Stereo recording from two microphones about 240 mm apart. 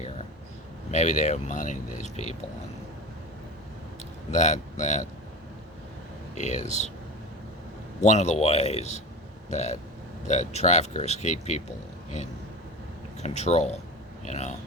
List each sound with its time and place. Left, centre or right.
0.9 s speech: left
4.3 s speech: left
6.3 s speech: left
8.0 s speech: left